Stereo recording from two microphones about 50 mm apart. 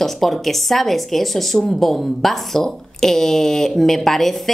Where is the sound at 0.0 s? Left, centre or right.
Centre.